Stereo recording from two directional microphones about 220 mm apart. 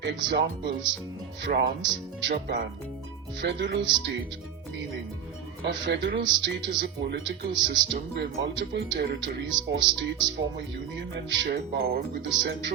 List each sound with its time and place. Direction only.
0.0 s speech: 55° right (ahead or behind)
3.3 s speech: 50° right (ahead or behind)
5.6 s speech: 50° right (ahead or behind)